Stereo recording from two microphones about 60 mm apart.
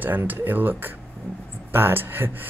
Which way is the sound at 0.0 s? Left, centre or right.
Right.